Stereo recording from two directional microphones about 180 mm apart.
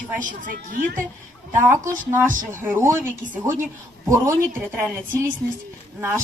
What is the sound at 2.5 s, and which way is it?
A woman's voice, 15° right (ahead or behind).